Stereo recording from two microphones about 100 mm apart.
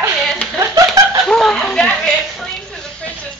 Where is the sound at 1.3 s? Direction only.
5° left (ahead or behind).